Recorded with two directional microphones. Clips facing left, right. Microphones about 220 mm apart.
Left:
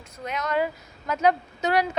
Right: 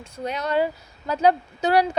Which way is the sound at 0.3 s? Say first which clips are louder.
Right 3 dB; 30° right (ahead or behind).